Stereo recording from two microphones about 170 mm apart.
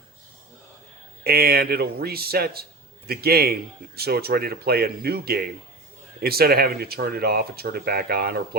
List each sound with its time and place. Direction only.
1.2 s a man's voice: 65° right (ahead or behind)